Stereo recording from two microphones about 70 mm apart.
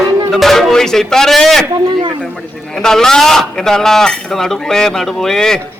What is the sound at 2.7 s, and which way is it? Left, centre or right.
A man's voice, centre.